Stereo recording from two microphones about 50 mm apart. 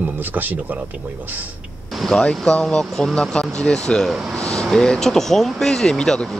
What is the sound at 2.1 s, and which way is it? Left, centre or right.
Speech, centre.